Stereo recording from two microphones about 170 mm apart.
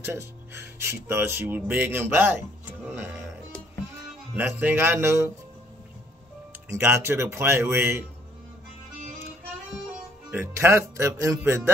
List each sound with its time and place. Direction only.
0.0 s speech: 15° right (ahead or behind)
4.3 s speech: 10° right (ahead or behind)
6.7 s speech: 15° right (ahead or behind)
10.3 s speech: 15° right (ahead or behind)